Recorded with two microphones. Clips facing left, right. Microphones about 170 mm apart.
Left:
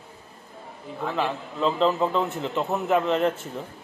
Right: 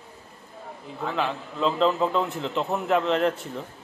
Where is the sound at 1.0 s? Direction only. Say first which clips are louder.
Left 1 dB; centre (ahead or behind).